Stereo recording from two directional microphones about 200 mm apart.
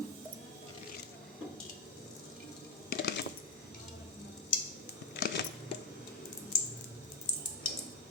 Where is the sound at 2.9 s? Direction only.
60° left (ahead or behind).